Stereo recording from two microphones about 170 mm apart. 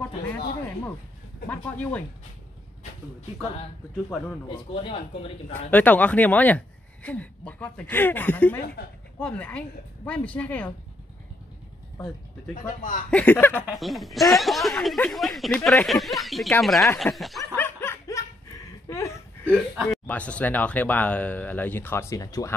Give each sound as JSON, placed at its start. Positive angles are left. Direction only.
{"t": 1.5, "sound": "speech", "side_deg": 10}
{"t": 3.9, "sound": "speech", "side_deg": 5}
{"t": 4.5, "sound": "speech", "side_deg": 30}
{"t": 5.5, "sound": "speech", "side_deg": 10}
{"t": 12.5, "sound": "a man's voice", "side_deg": 50}
{"t": 13.1, "sound": "speech", "side_deg": 10}
{"t": 13.7, "sound": "speech", "side_deg": 0}
{"t": 17.6, "sound": "snicker", "side_deg": 15}
{"t": 18.9, "sound": "a sound", "side_deg": 15}
{"t": 19.5, "sound": "speech", "side_deg": 0}